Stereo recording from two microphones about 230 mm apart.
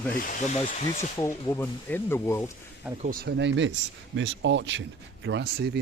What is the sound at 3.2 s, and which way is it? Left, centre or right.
Speech, right.